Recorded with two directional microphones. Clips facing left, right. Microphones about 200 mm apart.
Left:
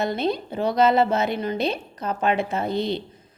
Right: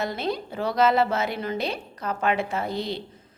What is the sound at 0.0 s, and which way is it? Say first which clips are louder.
A woman's voice: left 4 dB; 20° left (ahead or behind).